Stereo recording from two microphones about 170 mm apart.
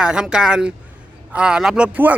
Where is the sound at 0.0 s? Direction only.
5° right (ahead or behind).